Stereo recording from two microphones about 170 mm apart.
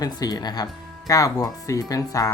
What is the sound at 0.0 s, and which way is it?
Speech, 20° left (ahead or behind).